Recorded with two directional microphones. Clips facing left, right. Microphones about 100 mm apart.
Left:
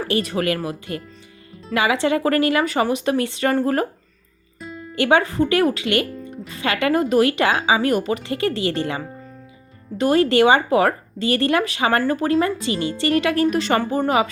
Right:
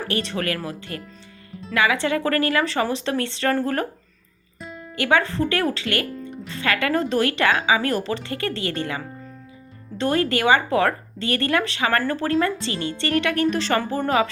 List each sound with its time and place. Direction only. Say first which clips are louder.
0.1 s speech: left 5 dB; 20° left (ahead or behind)
4.6 s music: left 2 dB; centre (ahead or behind)
4.9 s speech: left 3 dB; 20° left (ahead or behind)